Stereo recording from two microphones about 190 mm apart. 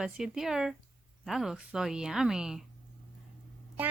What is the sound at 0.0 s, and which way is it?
A woman's voice, centre (ahead or behind).